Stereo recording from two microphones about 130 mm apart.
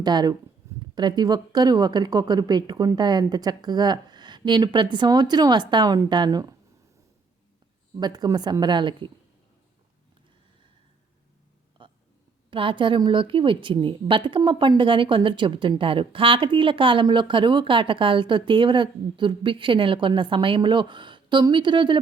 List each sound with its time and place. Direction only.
0.0 s a woman's voice: 30° right (ahead or behind)
7.9 s a woman's voice: 30° right (ahead or behind)
11.8 s a sound: 40° right (ahead or behind)
12.5 s a woman's voice: 40° right (ahead or behind)